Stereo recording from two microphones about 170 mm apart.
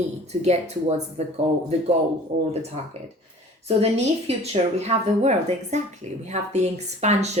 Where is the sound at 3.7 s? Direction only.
35° right (ahead or behind).